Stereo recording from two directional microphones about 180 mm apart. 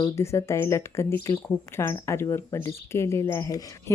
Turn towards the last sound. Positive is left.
turn(degrees=20)  # may be behind; listen again after turning